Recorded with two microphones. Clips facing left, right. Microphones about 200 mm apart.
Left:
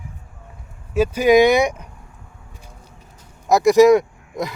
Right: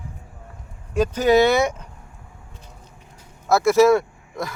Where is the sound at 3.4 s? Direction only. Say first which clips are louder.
Left 3 dB; 15° left (ahead or behind).